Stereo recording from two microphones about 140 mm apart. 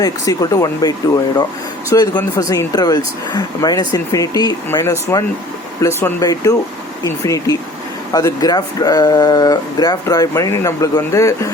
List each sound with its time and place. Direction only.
0.0 s speech: 25° left (ahead or behind)